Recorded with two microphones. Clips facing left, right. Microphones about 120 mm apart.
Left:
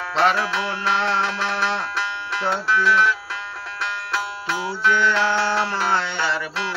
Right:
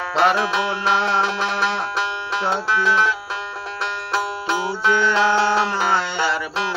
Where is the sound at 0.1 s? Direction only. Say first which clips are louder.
Right 2 dB; 15° right (ahead or behind).